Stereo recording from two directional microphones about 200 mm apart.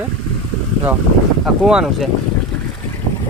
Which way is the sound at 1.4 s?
5° right (ahead or behind).